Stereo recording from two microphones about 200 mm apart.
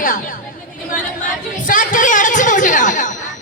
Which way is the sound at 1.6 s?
45° left (ahead or behind).